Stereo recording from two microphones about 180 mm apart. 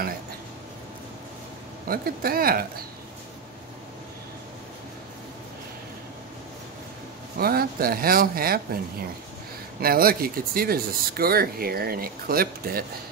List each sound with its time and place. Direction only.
1.9 s speech: 55° right (ahead or behind)
7.3 s speech: 55° right (ahead or behind)
9.8 s speech: 55° right (ahead or behind)